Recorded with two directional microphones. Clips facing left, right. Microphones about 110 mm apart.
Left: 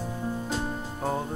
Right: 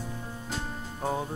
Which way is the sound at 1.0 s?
Centre (ahead or behind).